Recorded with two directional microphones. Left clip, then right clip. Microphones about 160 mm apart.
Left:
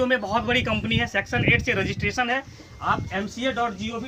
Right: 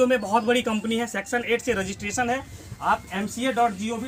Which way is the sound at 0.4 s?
30° right (ahead or behind).